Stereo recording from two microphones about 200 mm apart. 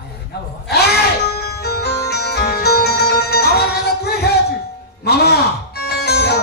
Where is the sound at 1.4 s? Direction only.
50° left (ahead or behind).